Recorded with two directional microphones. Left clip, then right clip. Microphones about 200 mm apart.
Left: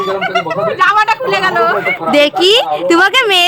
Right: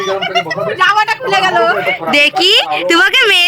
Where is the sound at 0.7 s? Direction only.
55° right (ahead or behind).